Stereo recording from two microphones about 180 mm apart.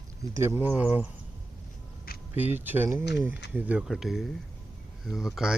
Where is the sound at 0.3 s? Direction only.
15° right (ahead or behind).